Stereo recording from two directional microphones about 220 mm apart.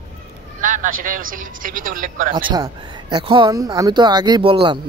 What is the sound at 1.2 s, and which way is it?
Speech, 40° right (ahead or behind).